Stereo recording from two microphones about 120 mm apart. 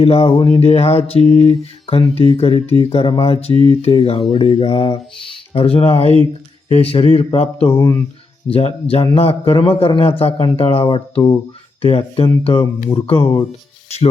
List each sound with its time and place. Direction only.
0.0 s mantra: 55° left (ahead or behind)
2.7 s a man's voice: 50° left (ahead or behind)
3.5 s speech: 50° right (ahead or behind)
3.8 s mantra: 55° left (ahead or behind)
4.3 s a man's voice: 45° left (ahead or behind)
7.3 s mantra: 55° left (ahead or behind)
8.4 s a man's voice: 55° left (ahead or behind)